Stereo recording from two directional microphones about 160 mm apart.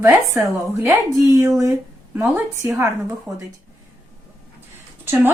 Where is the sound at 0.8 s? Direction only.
20° right (ahead or behind).